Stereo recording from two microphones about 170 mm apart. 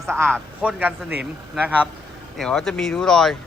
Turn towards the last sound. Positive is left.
turn(degrees=5)  # may be behind; listen again after turning